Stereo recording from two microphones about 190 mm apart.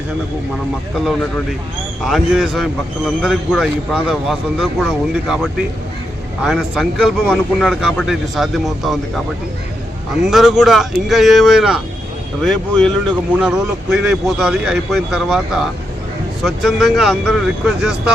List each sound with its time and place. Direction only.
2.0 s speech: centre (ahead or behind)
10.2 s speech: centre (ahead or behind)